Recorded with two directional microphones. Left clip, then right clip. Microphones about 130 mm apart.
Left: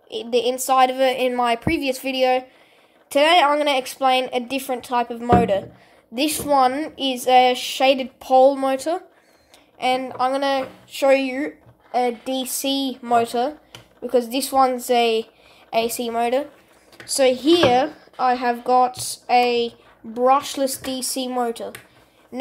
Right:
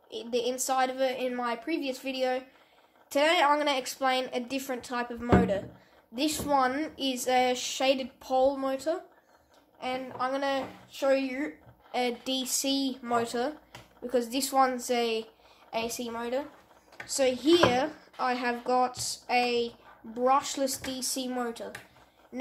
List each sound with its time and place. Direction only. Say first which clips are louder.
0.1 s a woman's voice: left 10 dB; 35° left (ahead or behind)
6.1 s a woman's voice: left 9 dB; 40° left (ahead or behind)
10.9 s speech: left 10 dB; 90° left; by 11.5 s 60° left (ahead or behind)
11.9 s speech: left 9 dB; 25° left (ahead or behind)
15.7 s a woman's voice: left 12 dB; 45° left (ahead or behind)
17.0 s speech: left 9 dB; 45° left (ahead or behind)